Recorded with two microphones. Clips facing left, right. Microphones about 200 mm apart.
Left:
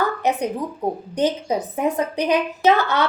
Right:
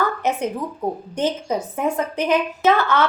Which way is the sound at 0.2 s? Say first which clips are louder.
Left 1 dB; 15° left (ahead or behind).